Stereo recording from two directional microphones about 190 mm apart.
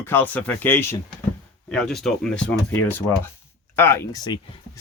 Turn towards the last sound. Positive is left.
turn(degrees=20)  # may be behind; listen again after turning